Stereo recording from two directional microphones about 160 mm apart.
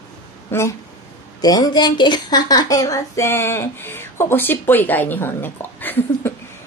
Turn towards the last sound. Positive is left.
turn(degrees=10)  # may be behind; listen again after turning